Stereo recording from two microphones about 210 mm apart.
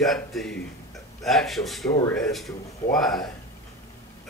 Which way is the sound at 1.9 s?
15° left (ahead or behind).